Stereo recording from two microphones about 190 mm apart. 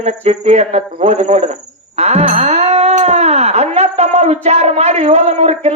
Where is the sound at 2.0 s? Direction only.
35° right (ahead or behind).